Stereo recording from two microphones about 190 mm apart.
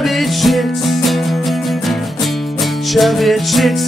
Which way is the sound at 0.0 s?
Centre (ahead or behind).